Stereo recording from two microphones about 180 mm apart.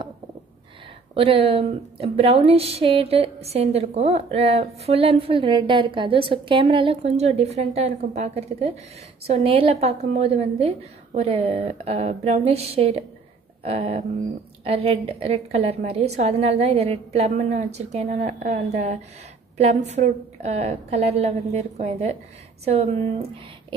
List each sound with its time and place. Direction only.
1.1 s speech: 30° right (ahead or behind)